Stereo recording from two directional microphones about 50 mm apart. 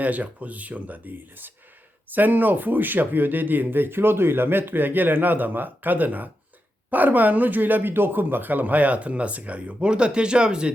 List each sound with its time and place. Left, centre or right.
0.0 s speech: right